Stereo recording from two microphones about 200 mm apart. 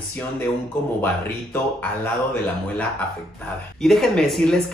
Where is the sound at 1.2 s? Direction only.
10° left (ahead or behind).